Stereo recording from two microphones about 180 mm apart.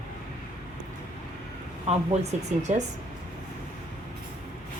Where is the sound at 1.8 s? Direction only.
35° right (ahead or behind).